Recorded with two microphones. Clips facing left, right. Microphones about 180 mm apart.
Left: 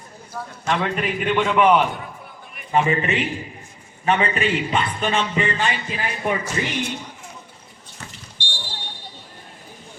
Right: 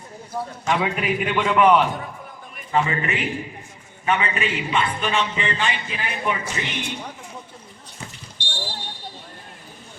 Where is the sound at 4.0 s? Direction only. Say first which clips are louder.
Left 3 dB; 35° left (ahead or behind).